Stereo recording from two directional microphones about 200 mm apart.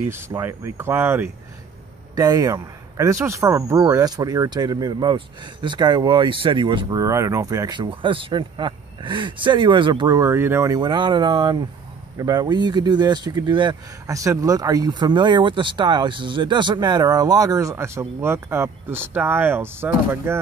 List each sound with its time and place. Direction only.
0.1 s speech: 10° right (ahead or behind)